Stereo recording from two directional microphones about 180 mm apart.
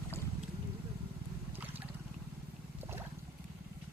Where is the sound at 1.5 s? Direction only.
10° right (ahead or behind).